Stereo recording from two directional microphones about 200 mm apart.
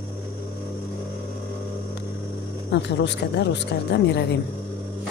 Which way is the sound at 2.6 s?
60° left (ahead or behind).